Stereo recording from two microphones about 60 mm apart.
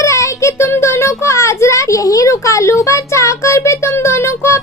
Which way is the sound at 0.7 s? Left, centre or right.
Left.